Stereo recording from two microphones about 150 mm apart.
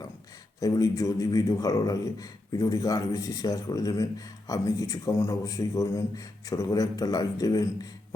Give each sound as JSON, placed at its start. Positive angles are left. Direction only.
{"t": 0.6, "sound": "a man's voice", "side_deg": 25}